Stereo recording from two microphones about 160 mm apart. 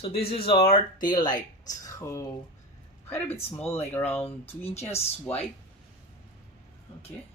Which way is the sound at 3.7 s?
15° left (ahead or behind).